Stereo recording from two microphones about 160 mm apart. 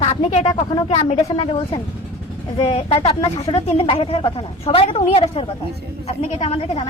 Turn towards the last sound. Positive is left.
turn(degrees=45)  # may be behind; listen again after turning